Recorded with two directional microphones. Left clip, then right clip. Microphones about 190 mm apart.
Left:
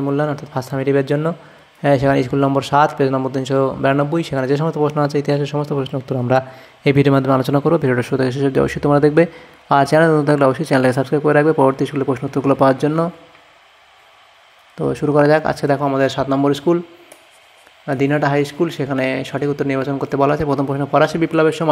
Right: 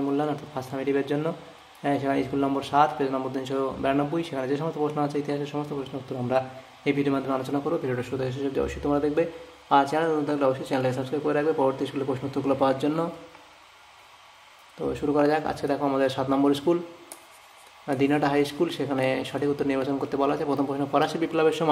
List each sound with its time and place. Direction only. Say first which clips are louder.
0.0 s speech: left 7 dB; 35° left (ahead or behind)
14.8 s speech: left 9 dB; 35° left (ahead or behind)
17.8 s speech: left 7 dB; 25° left (ahead or behind)